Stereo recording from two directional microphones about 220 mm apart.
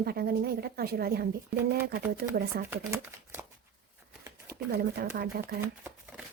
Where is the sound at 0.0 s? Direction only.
45° right (ahead or behind).